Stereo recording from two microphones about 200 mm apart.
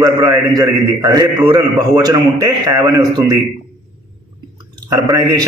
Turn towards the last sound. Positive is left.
turn(degrees=-20)  # may be behind; listen again after turning